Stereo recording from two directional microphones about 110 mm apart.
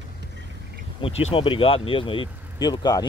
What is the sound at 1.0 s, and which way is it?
Speech, 65° left (ahead or behind).